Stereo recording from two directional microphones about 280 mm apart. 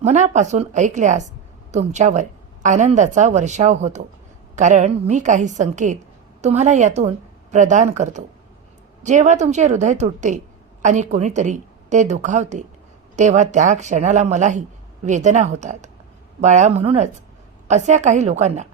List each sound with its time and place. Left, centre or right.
0.0 s speech: right